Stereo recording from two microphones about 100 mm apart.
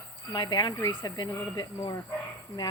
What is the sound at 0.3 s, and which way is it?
Speech, 45° left (ahead or behind).